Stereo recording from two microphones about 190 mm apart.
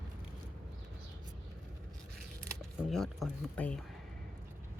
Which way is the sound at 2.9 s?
Centre (ahead or behind).